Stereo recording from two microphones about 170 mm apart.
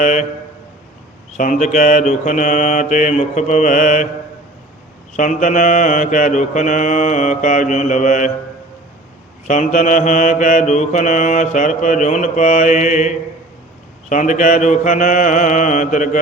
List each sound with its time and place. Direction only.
0.0 s mantra: 45° left (ahead or behind)
1.6 s mantra: 50° left (ahead or behind)
5.1 s mantra: 50° left (ahead or behind)
9.5 s mantra: 50° left (ahead or behind)